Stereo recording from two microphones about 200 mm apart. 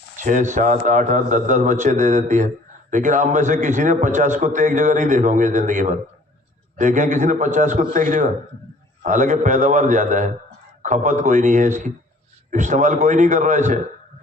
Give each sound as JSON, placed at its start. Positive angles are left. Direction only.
{"t": 0.2, "sound": "a man's voice", "side_deg": -40}